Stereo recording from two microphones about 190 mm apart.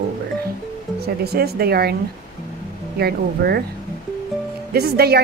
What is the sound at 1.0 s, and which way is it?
Speech, 55° right (ahead or behind).